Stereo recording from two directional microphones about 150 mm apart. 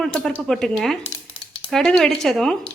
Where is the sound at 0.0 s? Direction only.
Centre (ahead or behind).